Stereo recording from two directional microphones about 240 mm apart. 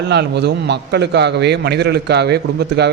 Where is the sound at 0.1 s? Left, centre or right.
Right.